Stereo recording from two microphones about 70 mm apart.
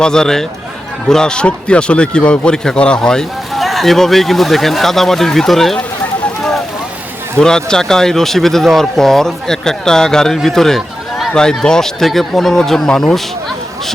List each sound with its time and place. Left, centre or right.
0.0 s a man's voice: centre
7.3 s speech: centre